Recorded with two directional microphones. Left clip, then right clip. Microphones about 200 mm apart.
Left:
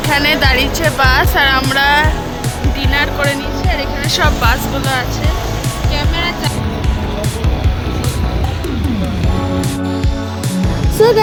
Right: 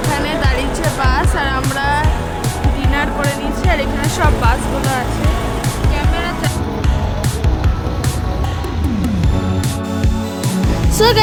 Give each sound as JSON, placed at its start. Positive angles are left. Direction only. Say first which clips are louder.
{"t": 0.1, "sound": "music", "louder": "left 8 dB", "side_deg": 10}
{"t": 0.9, "sound": "speech", "louder": "left 6 dB", "side_deg": 5}
{"t": 2.9, "sound": "speech", "louder": "left 4 dB", "side_deg": -5}
{"t": 11.0, "sound": "speech", "louder": "left 3 dB", "side_deg": 20}